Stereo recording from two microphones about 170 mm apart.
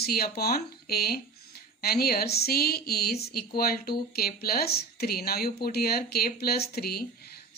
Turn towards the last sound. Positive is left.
turn(degrees=65)  # may be behind; listen again after turning